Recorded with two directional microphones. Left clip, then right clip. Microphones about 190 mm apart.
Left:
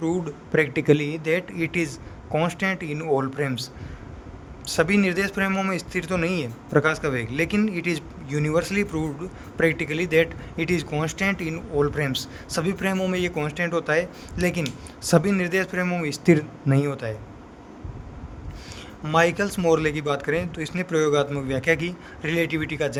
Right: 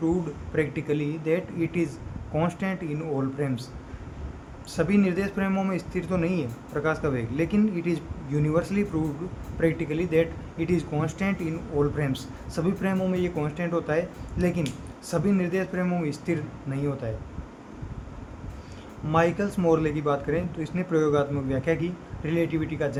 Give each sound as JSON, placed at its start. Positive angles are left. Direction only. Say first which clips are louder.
{"t": 0.0, "sound": "speech", "louder": "left 1 dB", "side_deg": 55}
{"t": 19.0, "sound": "speech", "louder": "left 3 dB", "side_deg": 65}